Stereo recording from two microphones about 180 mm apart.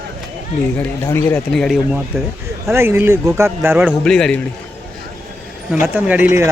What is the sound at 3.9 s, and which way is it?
Speech, 5° left (ahead or behind).